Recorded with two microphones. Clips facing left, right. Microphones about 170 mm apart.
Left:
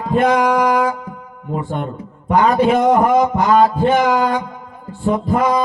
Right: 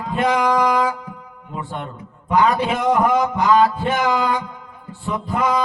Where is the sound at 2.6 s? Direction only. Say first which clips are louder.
Left 5 dB; 40° left (ahead or behind).